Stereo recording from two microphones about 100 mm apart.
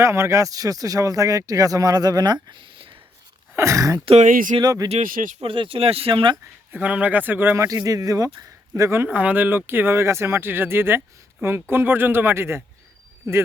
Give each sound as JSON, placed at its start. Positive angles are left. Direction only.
{"t": 0.0, "sound": "speech", "side_deg": -30}
{"t": 3.5, "sound": "speech", "side_deg": -30}
{"t": 4.0, "sound": "speech", "side_deg": -70}
{"t": 4.6, "sound": "speech", "side_deg": -40}
{"t": 5.4, "sound": "speech", "side_deg": -65}
{"t": 6.3, "sound": "speech", "side_deg": -15}
{"t": 9.1, "sound": "speech", "side_deg": -15}